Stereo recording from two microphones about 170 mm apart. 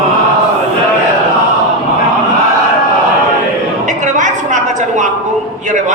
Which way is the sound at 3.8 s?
45° right (ahead or behind).